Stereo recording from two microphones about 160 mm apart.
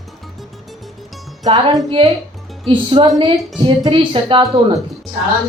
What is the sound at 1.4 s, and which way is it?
Speech, 25° right (ahead or behind).